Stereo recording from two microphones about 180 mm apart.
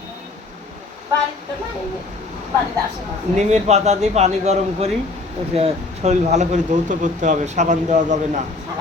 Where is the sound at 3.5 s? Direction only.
40° right (ahead or behind).